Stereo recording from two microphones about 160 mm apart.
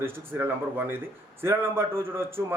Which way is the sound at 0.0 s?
15° right (ahead or behind).